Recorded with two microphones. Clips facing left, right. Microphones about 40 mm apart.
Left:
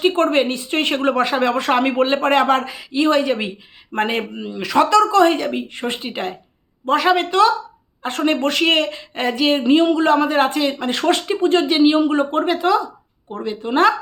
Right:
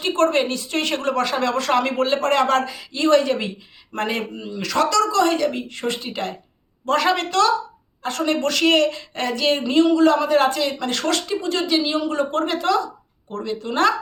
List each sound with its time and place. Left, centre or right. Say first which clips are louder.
0.0 s a woman's voice: left 3 dB; centre
8.0 s a woman's voice: left 3 dB; left
11.3 s a woman's voice: left 5 dB; left